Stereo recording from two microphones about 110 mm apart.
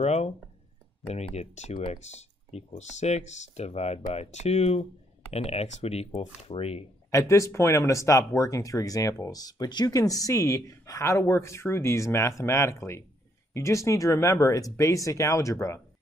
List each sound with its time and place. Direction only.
0.0 s speech: 75° left (ahead or behind)
7.1 s speech: 25° left (ahead or behind)